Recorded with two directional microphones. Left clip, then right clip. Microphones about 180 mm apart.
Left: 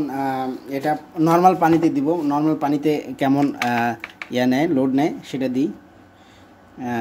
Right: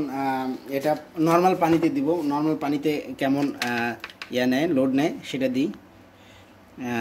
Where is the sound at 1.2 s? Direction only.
30° left (ahead or behind); by 5.7 s 15° left (ahead or behind).